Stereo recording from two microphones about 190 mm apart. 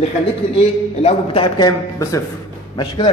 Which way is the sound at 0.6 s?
30° left (ahead or behind).